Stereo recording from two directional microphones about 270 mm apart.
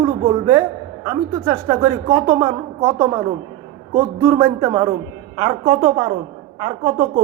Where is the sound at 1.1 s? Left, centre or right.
Centre.